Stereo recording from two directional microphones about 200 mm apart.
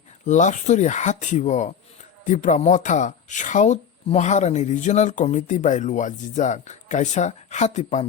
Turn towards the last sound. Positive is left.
turn(degrees=35)  # may be behind; listen again after turning